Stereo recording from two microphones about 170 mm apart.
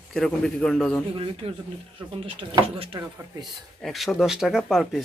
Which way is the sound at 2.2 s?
30° right (ahead or behind).